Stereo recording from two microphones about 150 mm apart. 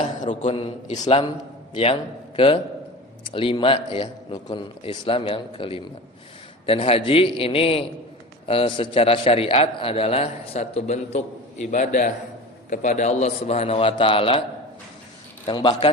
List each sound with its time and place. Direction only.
0.0 s a man's voice: 45° left (ahead or behind)
11.6 s a man's voice: 55° left (ahead or behind); by 14.4 s 40° left (ahead or behind)
15.4 s a man's voice: 35° left (ahead or behind)